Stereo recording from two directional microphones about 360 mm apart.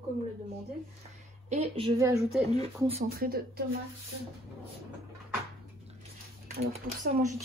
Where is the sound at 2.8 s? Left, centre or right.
Right.